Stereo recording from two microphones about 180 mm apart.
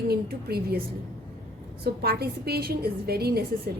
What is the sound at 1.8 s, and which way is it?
A woman's voice, 60° right (ahead or behind).